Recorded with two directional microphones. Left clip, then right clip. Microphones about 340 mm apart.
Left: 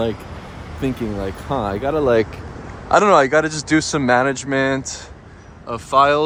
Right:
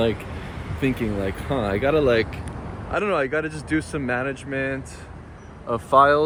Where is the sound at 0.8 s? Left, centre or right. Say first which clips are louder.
Left 1 dB; centre.